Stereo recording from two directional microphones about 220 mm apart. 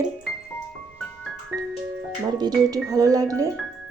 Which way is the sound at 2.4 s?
15° right (ahead or behind).